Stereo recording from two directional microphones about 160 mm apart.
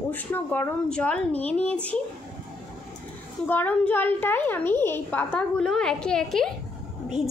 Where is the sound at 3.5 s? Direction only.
10° left (ahead or behind).